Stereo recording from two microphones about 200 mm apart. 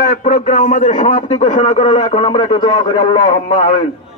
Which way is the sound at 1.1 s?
25° left (ahead or behind).